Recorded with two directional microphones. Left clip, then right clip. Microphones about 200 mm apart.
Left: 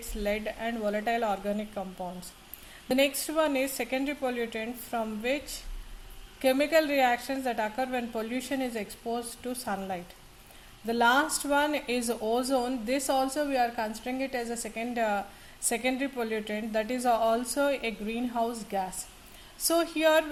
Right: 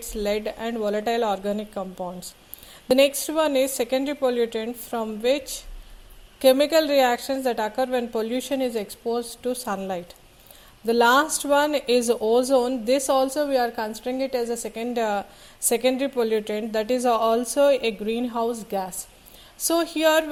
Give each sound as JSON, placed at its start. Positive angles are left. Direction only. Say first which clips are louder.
{"t": 0.2, "sound": "speech", "louder": "right 6 dB", "side_deg": -35}
{"t": 6.4, "sound": "speech", "louder": "right 7 dB", "side_deg": -35}